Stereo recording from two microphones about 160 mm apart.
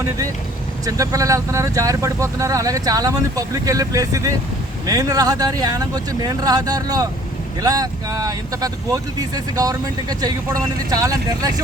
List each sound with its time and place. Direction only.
0.9 s speech: 20° right (ahead or behind)